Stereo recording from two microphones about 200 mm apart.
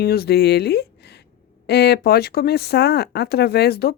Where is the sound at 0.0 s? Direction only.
50° left (ahead or behind).